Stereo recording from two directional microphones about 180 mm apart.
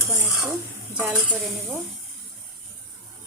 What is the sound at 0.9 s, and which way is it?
Dishes, 5° right (ahead or behind).